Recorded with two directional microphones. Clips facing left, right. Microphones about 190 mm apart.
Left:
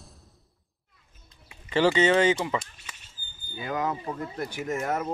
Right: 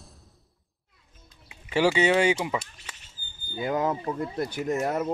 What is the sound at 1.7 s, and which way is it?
Speech, 10° right (ahead or behind).